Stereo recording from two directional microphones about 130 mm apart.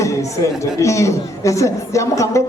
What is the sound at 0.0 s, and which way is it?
A man's voice, 25° left (ahead or behind).